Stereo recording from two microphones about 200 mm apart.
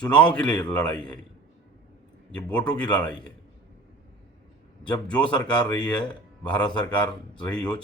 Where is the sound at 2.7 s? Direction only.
20° left (ahead or behind).